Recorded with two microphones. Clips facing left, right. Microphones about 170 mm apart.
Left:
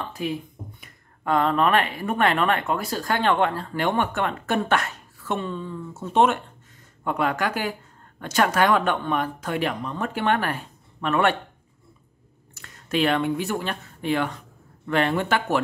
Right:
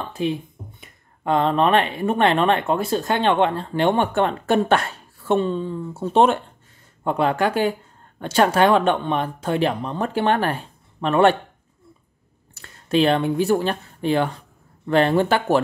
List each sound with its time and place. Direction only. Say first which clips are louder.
0.1 s speech: right 5 dB; 25° right (ahead or behind)
12.5 s speech: right 5 dB; 30° right (ahead or behind)